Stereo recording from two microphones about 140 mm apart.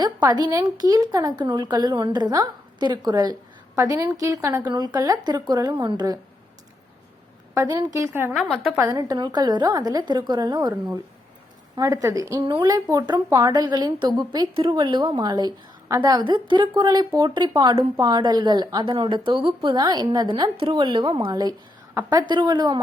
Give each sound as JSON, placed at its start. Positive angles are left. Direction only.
{"t": 0.0, "sound": "a woman's voice", "side_deg": -30}
{"t": 7.5, "sound": "speech", "side_deg": -25}
{"t": 8.4, "sound": "a woman's voice", "side_deg": 0}
{"t": 8.8, "sound": "speech", "side_deg": -25}
{"t": 11.8, "sound": "speech", "side_deg": -25}
{"t": 12.4, "sound": "a woman's voice", "side_deg": -35}
{"t": 19.8, "sound": "a woman's voice", "side_deg": -30}